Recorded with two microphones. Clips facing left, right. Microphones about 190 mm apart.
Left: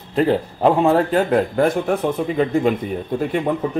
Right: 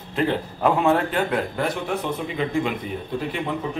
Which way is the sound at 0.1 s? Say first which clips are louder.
Left 6 dB; 40° left (ahead or behind).